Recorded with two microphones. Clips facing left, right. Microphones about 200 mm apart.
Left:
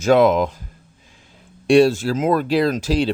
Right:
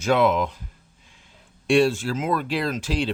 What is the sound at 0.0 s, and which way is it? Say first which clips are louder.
Speech: left 6 dB; 40° left (ahead or behind).